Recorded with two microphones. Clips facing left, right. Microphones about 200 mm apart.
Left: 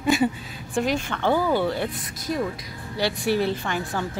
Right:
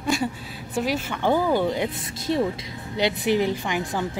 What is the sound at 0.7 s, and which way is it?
A woman's voice, 5° right (ahead or behind).